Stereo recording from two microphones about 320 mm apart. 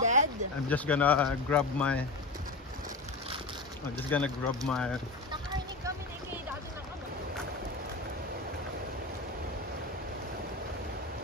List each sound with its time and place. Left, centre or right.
0.0 s a sound: right
0.7 s speech: centre
4.1 s speech: centre